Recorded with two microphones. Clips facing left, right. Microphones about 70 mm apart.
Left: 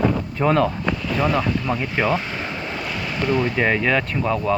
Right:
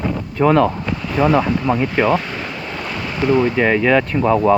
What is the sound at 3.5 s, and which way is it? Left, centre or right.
Speech, centre.